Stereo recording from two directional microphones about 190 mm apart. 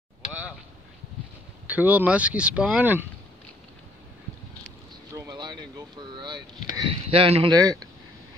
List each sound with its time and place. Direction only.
1.7 s speech: 10° right (ahead or behind)
5.1 s boat: 20° right (ahead or behind)
6.7 s speech: 25° right (ahead or behind)